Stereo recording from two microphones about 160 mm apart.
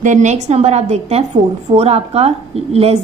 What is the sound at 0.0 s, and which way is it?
A woman's voice, 50° right (ahead or behind).